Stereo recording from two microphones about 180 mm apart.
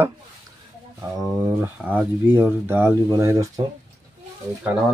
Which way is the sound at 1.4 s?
10° right (ahead or behind).